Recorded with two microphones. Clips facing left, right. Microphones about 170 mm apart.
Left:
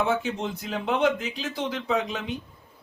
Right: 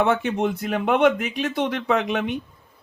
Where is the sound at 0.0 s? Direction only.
65° right (ahead or behind).